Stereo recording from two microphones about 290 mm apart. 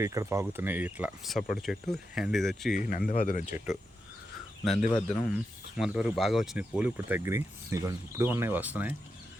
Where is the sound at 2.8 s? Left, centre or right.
Left.